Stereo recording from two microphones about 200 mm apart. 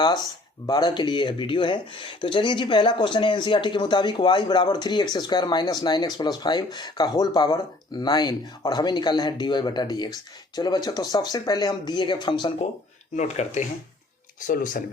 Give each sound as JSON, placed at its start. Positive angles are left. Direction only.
{"t": 0.7, "sound": "speech", "side_deg": 20}
{"t": 13.1, "sound": "speech", "side_deg": 35}